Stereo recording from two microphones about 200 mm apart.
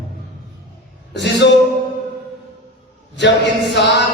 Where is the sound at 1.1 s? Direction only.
60° left (ahead or behind).